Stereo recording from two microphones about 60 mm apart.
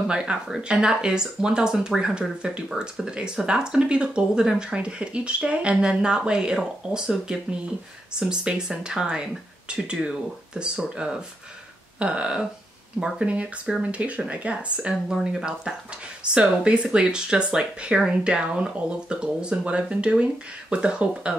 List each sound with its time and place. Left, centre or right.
0.0 s speech: centre
13.0 s speech: right